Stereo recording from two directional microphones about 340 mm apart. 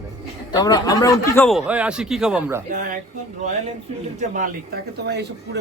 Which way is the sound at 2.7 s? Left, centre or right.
Right.